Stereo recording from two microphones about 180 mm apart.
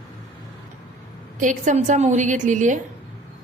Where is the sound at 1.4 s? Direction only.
45° right (ahead or behind).